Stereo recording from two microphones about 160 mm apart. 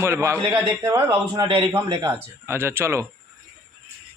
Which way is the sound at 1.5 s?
30° right (ahead or behind).